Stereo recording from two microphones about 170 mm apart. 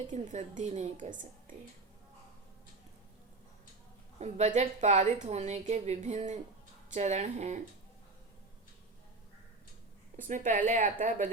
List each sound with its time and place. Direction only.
0.1 s a woman's voice: 45° right (ahead or behind)
4.2 s a woman's voice: 40° right (ahead or behind)
10.2 s a woman's voice: 50° right (ahead or behind)